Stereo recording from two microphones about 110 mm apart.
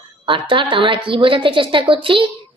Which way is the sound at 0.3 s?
50° right (ahead or behind).